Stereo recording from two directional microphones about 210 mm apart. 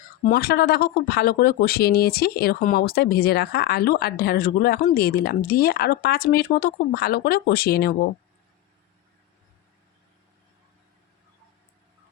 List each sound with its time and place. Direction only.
0.3 s speech: 45° left (ahead or behind)